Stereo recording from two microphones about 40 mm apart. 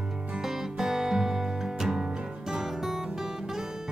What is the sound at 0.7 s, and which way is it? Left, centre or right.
Music, centre.